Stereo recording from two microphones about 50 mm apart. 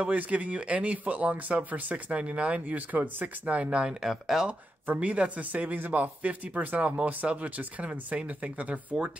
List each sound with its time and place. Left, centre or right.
0.0 s speech: right
3.8 s speech: centre
4.8 s speech: right